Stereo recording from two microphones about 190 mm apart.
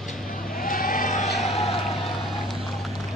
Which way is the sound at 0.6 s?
45° left (ahead or behind).